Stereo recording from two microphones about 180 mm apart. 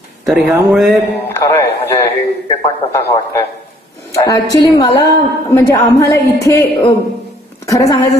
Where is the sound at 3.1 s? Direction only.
10° left (ahead or behind).